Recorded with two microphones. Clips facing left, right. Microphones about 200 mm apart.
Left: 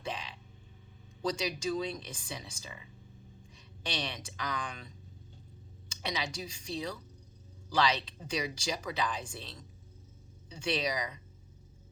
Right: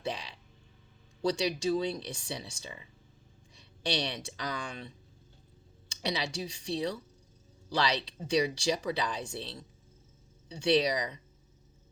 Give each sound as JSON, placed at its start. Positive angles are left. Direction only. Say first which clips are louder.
{"t": 0.0, "sound": "burping", "louder": "right 3 dB", "side_deg": -35}
{"t": 1.2, "sound": "speech", "louder": "right 4 dB", "side_deg": -30}
{"t": 6.0, "sound": "speech", "louder": "right 3 dB", "side_deg": -30}